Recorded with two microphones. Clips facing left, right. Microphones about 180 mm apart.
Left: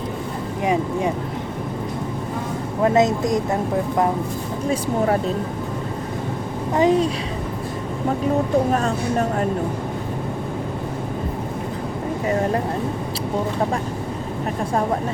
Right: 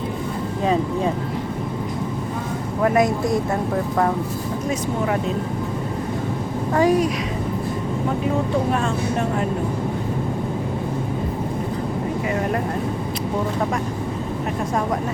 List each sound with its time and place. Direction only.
0.6 s speech: 15° left (ahead or behind)
2.8 s speech: 20° left (ahead or behind)
4.7 s speech: 35° left (ahead or behind)
6.7 s speech: 25° left (ahead or behind)
8.7 s speech: 40° left (ahead or behind)